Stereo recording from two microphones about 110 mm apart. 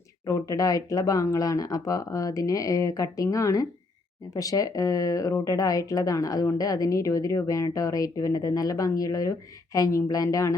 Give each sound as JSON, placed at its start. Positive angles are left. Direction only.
{"t": 0.3, "sound": "speech", "side_deg": 30}